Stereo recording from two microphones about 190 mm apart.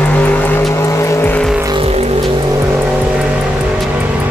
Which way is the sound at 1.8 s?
35° right (ahead or behind).